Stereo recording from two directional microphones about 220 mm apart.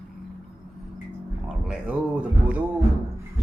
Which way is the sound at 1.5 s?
5° right (ahead or behind).